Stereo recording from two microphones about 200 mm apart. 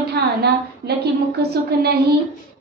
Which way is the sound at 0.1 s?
55° right (ahead or behind).